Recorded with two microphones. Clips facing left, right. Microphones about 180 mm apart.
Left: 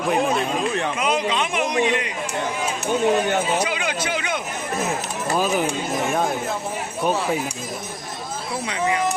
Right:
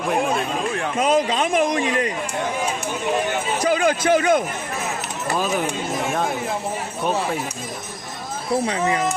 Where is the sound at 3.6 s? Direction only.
45° right (ahead or behind).